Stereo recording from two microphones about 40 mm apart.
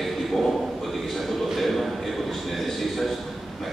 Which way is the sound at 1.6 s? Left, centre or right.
Centre.